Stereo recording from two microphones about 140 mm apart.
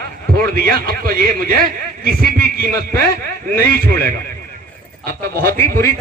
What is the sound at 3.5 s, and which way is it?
Speech, 90° right.